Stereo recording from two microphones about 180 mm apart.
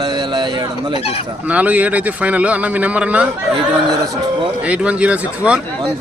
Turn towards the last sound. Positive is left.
turn(degrees=-5)  # may be behind; listen again after turning